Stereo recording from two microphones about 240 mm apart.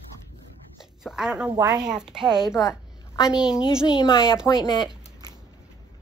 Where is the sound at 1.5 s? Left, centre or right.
Centre.